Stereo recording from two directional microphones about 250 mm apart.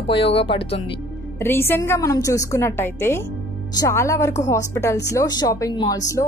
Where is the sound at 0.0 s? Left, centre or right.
Left.